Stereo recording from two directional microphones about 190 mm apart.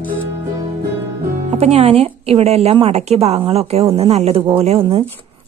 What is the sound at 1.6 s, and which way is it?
A woman's voice, 35° right (ahead or behind).